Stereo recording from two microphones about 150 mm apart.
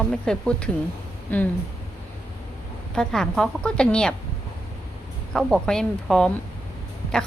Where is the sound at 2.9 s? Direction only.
5° left (ahead or behind).